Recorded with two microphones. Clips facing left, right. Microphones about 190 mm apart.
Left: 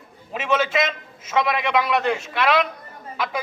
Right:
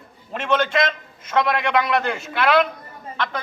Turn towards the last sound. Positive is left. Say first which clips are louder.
# even
turn(degrees=5)  # may be behind; listen again after turning